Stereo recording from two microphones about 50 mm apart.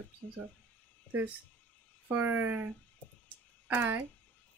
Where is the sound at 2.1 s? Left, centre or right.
Right.